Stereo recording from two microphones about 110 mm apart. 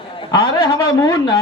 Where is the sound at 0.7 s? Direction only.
30° left (ahead or behind).